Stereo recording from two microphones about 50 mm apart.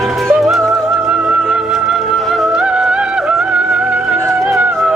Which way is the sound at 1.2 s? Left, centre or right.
Centre.